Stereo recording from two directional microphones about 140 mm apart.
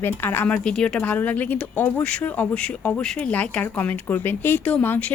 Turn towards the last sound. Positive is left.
turn(degrees=10)  # may be behind; listen again after turning